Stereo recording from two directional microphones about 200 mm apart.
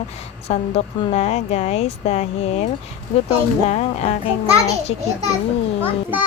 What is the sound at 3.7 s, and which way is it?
Speech, 30° left (ahead or behind).